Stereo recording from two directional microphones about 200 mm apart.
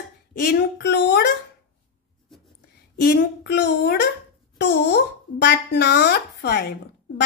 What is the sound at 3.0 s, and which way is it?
Speech, 55° left (ahead or behind).